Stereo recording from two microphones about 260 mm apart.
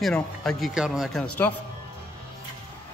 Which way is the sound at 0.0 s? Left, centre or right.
Centre.